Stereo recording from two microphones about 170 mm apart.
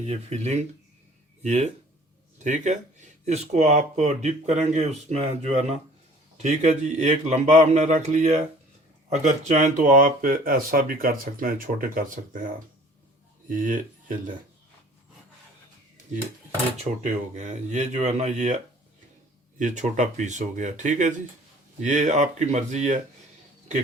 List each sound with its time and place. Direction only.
0.0 s speech: 40° right (ahead or behind)
13.5 s speech: 50° right (ahead or behind)
17.0 s speech: 45° right (ahead or behind)
19.5 s speech: 45° right (ahead or behind)